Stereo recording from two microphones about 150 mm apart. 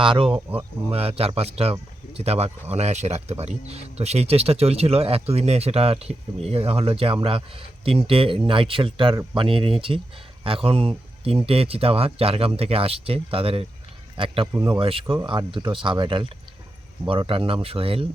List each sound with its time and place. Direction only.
0.0 s speech: 35° right (ahead or behind)
14.5 s speech: 15° right (ahead or behind)
14.8 s speech: 35° right (ahead or behind)